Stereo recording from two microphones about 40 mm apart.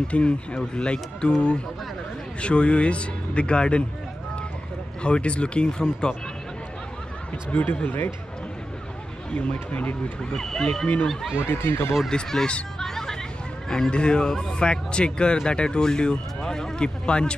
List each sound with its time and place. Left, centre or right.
0.1 s speech: left
5.0 s speech: left
7.5 s speech: left
9.3 s speech: left
10.3 s speech: centre
11.4 s speech: left
12.1 s speech: centre
12.7 s hubbub: centre
13.7 s speech: centre